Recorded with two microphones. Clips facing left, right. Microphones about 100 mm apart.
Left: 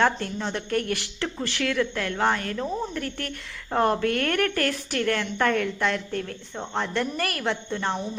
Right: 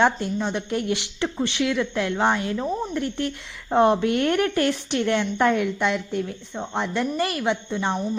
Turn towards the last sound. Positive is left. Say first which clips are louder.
# right 3 dB
turn(degrees=-10)  # may be behind; listen again after turning